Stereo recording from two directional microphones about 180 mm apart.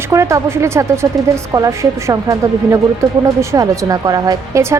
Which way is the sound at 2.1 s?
15° right (ahead or behind).